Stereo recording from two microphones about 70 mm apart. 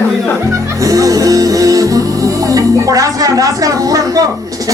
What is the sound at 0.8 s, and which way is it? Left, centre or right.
Music, right.